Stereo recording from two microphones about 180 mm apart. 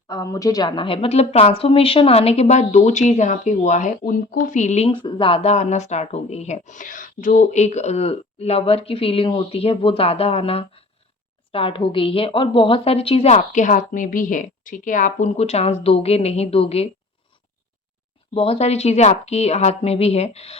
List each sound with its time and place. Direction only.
0.1 s speech: 20° left (ahead or behind); by 16.9 s 35° left (ahead or behind)
18.3 s speech: 35° left (ahead or behind)